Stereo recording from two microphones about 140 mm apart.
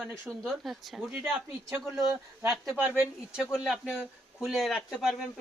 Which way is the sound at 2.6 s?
10° right (ahead or behind).